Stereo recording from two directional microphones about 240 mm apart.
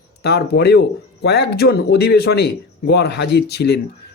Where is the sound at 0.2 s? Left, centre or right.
Left.